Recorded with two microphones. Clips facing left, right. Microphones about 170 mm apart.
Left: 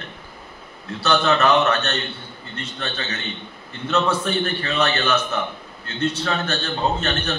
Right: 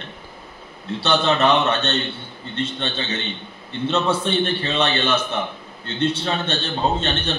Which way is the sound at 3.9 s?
25° right (ahead or behind).